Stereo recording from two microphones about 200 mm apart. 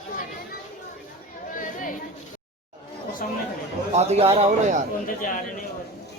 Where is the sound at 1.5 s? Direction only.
40° left (ahead or behind).